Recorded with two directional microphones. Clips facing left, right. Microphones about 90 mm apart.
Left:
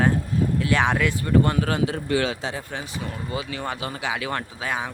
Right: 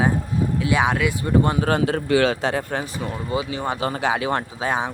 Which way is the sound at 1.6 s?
45° right (ahead or behind).